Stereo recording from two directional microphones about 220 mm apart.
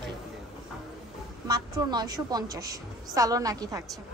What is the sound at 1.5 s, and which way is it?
A woman's voice, 20° right (ahead or behind).